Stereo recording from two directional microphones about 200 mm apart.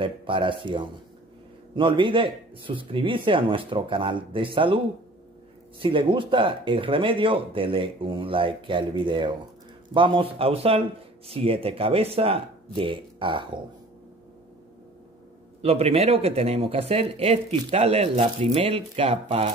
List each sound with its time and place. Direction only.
0.0 s speech: 25° right (ahead or behind)
5.8 s speech: 25° right (ahead or behind)
15.6 s speech: 30° right (ahead or behind)